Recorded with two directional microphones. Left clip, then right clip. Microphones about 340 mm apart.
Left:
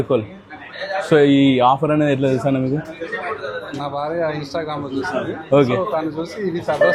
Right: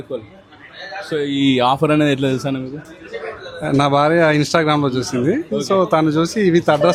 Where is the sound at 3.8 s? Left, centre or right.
Right.